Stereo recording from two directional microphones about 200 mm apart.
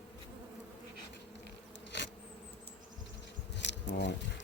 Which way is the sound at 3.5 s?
60° left (ahead or behind).